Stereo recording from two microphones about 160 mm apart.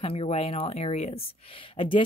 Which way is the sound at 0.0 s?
35° left (ahead or behind).